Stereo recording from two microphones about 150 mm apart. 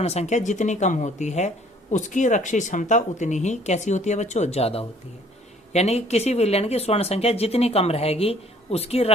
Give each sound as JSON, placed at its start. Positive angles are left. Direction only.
{"t": 0.0, "sound": "speech", "side_deg": 45}